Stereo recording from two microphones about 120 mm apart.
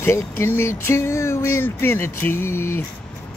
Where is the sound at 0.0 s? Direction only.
20° left (ahead or behind).